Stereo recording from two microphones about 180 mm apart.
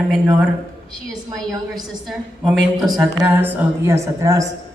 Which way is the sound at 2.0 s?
Centre (ahead or behind).